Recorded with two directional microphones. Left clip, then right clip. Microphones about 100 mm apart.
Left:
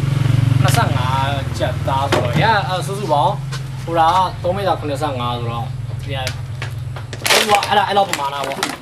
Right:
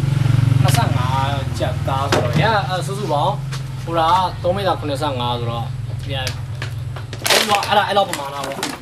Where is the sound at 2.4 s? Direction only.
15° left (ahead or behind).